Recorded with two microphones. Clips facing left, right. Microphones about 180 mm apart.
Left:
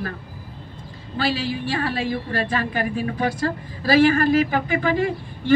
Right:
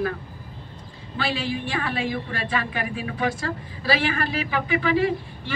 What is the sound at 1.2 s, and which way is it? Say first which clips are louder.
A woman's voice: left 3 dB; 35° left (ahead or behind).